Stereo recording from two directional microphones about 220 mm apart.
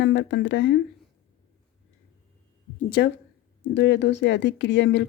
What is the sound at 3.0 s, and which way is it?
Speech, 50° left (ahead or behind).